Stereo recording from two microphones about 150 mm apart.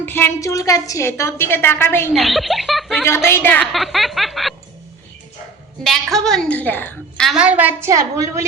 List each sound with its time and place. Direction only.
0.0 s a woman's voice: 15° left (ahead or behind)
2.1 s a woman's voice: centre (ahead or behind)
3.2 s a woman's voice: 15° left (ahead or behind)
3.7 s a woman's voice: centre (ahead or behind)
5.8 s a woman's voice: centre (ahead or behind)
7.3 s a woman's voice: 10° right (ahead or behind)